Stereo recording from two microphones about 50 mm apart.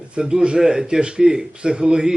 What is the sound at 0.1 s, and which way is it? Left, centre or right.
Speech, centre.